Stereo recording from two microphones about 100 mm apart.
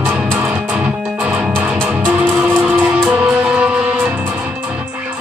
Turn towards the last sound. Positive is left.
turn(degrees=-10)  # may be behind; listen again after turning